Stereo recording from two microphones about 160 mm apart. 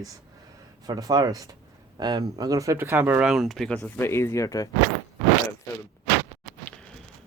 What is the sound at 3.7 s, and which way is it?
Speech, 15° left (ahead or behind).